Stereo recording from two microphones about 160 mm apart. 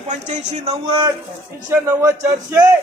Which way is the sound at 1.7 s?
20° right (ahead or behind).